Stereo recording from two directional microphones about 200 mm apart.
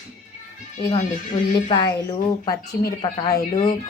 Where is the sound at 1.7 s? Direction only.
20° left (ahead or behind).